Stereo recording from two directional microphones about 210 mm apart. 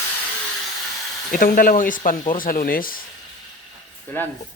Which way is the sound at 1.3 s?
40° left (ahead or behind).